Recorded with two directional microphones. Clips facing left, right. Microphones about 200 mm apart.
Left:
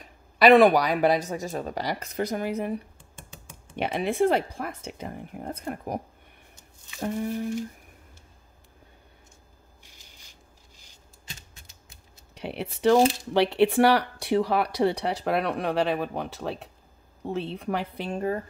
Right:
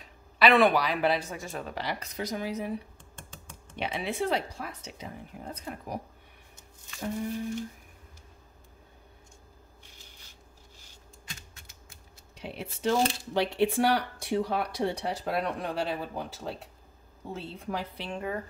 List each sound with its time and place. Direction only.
0.0 s speech: 40° left (ahead or behind)
3.2 s typing: 10° left (ahead or behind)
3.7 s speech: 50° left (ahead or behind)
12.4 s a woman's voice: 65° left (ahead or behind)
18.0 s speech: 40° left (ahead or behind)